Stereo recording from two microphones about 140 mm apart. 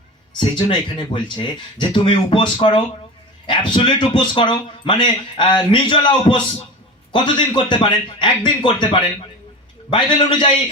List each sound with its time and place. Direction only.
0.3 s a man's voice: 35° left (ahead or behind)